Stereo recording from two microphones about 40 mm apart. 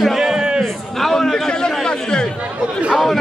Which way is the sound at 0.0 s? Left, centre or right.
Centre.